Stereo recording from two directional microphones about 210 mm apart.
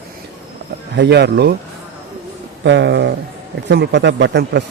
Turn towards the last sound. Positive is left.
turn(degrees=-55)  # may be behind; listen again after turning